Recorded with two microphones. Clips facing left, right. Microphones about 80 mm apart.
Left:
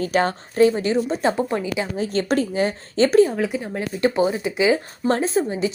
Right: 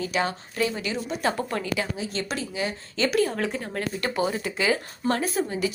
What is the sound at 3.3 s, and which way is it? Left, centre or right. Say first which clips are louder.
A woman's voice: left 4 dB; centre.